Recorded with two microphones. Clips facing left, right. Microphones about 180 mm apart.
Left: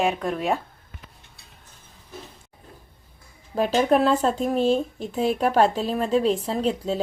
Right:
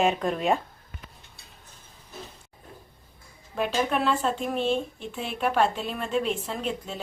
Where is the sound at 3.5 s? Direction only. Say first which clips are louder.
Left 6 dB; 35° left (ahead or behind).